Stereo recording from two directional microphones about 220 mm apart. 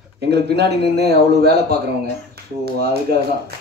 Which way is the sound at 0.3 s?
50° right (ahead or behind).